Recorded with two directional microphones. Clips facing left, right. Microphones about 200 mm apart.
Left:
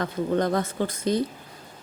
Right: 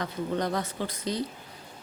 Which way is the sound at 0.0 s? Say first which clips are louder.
Left 5 dB; 50° left (ahead or behind).